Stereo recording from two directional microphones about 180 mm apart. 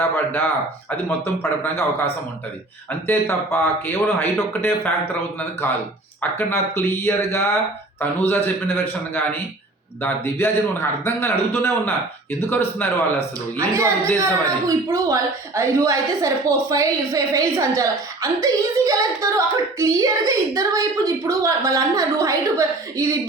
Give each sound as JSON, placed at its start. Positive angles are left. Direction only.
{"t": 0.3, "sound": "a man's voice", "side_deg": 10}
{"t": 3.1, "sound": "a man's voice", "side_deg": 10}
{"t": 13.6, "sound": "speech", "side_deg": -15}